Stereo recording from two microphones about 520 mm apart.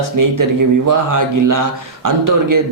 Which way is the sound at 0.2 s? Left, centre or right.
Right.